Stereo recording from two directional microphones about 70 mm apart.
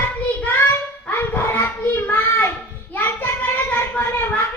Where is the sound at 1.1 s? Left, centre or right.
Left.